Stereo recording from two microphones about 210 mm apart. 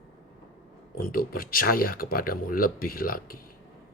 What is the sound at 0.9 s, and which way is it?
Speech, 45° left (ahead or behind).